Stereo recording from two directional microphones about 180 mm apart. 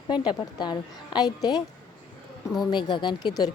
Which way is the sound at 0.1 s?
25° left (ahead or behind).